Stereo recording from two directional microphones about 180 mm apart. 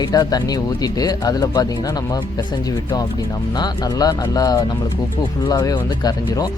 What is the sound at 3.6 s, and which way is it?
Speech, 20° left (ahead or behind).